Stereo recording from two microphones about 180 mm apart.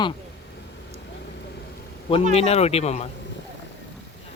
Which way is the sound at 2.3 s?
35° left (ahead or behind).